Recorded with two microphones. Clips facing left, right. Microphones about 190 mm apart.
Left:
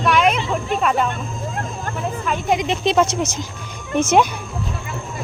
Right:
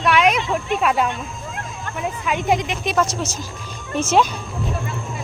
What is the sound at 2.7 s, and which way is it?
Speech, 25° left (ahead or behind).